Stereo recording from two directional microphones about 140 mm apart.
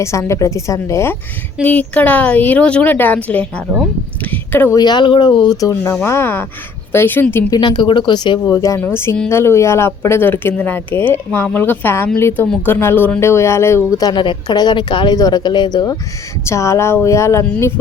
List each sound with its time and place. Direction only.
0.0 s speech: 20° left (ahead or behind)
1.6 s speech: 10° left (ahead or behind)
4.2 s a sound: 15° left (ahead or behind)
4.8 s speech: 30° left (ahead or behind); by 7.6 s 15° left (ahead or behind)
7.6 s speech: 35° left (ahead or behind)